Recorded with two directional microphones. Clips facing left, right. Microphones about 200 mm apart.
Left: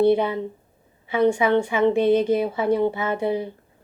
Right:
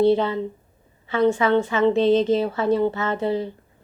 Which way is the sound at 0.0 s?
15° left (ahead or behind).